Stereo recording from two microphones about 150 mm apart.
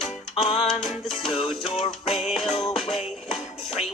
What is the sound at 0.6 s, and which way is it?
Music, centre (ahead or behind).